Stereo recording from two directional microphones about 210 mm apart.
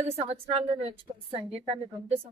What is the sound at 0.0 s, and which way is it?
A woman's voice, 30° right (ahead or behind).